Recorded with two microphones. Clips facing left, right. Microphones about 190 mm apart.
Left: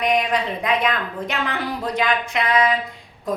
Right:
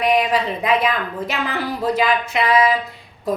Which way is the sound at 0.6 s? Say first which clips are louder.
Right 2 dB; 5° right (ahead or behind).